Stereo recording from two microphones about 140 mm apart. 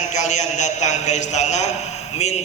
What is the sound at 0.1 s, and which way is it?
A man's voice, 60° left (ahead or behind).